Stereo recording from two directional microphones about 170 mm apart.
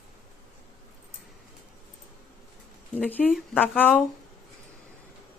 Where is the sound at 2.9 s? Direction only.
10° left (ahead or behind).